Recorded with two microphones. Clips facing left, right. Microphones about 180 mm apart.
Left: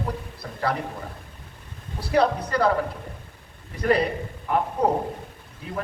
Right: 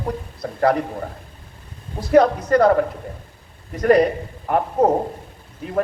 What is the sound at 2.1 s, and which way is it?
Speech, 50° right (ahead or behind).